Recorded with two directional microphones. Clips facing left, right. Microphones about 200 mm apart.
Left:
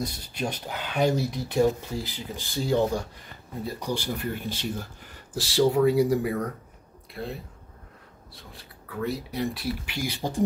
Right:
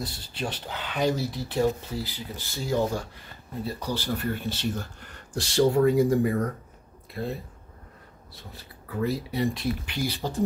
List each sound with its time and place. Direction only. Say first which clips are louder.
0.4 s speech: left 2 dB; 15° left (ahead or behind)
8.5 s speech: right 3 dB; centre (ahead or behind)